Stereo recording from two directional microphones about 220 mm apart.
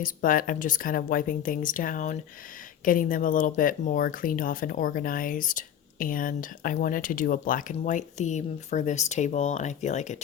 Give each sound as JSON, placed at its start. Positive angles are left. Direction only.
{"t": 0.0, "sound": "speech", "side_deg": 40}